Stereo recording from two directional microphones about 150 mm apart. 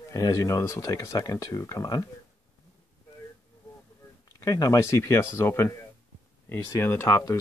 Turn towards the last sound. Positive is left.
turn(degrees=20)  # may be behind; listen again after turning